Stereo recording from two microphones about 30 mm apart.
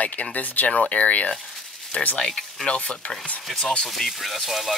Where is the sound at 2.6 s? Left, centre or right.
Left.